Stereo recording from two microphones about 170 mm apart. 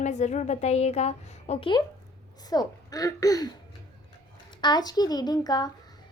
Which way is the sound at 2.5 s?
20° left (ahead or behind).